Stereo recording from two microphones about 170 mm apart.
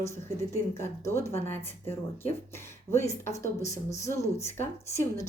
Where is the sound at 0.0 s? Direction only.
15° left (ahead or behind).